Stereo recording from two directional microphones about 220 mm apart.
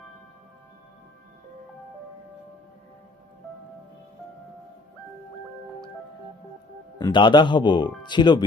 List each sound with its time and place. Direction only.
7.0 s speech: 20° left (ahead or behind)